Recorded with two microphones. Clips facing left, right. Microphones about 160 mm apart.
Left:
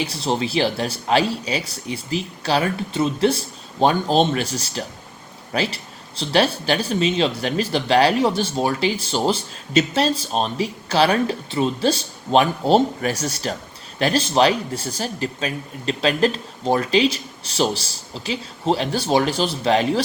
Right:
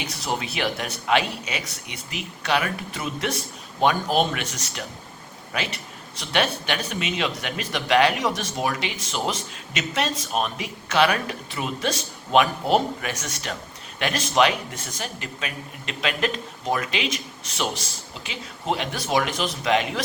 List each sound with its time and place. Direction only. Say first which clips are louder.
0.0 s speech: left 6 dB; 30° left (ahead or behind)